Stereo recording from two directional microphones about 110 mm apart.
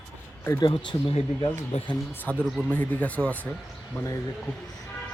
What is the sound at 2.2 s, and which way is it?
A man's voice, 5° left (ahead or behind).